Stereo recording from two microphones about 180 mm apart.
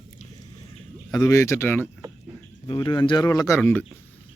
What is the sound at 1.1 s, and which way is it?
Speech, 20° left (ahead or behind).